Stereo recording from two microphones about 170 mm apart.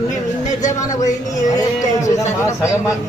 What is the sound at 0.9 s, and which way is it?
Speech, 20° left (ahead or behind).